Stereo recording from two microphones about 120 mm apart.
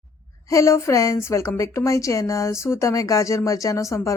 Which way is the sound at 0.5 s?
25° left (ahead or behind).